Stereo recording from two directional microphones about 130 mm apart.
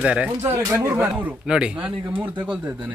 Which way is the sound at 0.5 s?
20° right (ahead or behind).